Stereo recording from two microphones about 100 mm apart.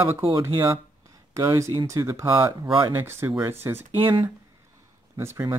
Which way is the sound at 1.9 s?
30° right (ahead or behind).